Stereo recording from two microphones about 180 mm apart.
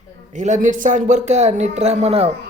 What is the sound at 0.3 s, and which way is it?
Speech, 45° right (ahead or behind).